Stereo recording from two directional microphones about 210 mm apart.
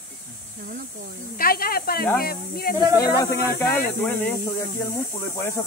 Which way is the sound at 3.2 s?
10° left (ahead or behind).